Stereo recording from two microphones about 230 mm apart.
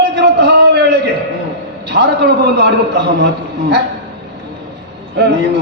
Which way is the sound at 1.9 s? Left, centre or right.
Right.